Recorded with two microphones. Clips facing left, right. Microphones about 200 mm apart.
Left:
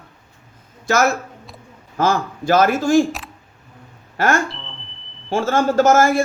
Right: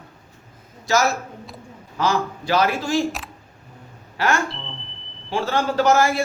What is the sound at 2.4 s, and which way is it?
Speech, 50° left (ahead or behind).